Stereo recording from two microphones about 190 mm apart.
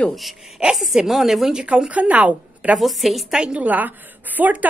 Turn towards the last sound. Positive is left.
turn(degrees=-10)  # may be behind; listen again after turning